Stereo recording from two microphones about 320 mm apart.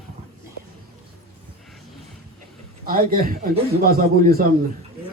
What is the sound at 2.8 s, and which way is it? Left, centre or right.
Speech, right.